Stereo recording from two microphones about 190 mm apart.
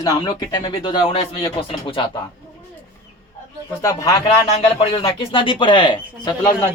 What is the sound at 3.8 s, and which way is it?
Speech, 15° left (ahead or behind).